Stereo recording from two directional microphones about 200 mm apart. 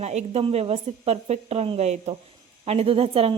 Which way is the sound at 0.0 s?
35° right (ahead or behind).